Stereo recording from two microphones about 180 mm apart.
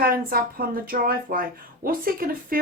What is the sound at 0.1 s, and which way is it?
Speech, 55° right (ahead or behind).